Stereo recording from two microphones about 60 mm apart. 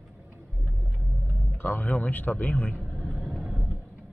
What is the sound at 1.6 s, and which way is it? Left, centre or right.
Speech, left.